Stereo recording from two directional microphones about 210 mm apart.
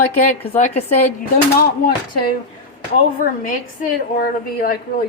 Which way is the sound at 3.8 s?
45° left (ahead or behind).